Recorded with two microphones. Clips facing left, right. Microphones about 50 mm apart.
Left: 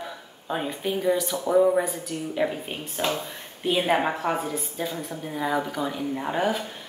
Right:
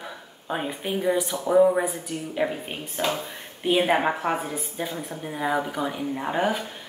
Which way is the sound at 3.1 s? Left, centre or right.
Centre.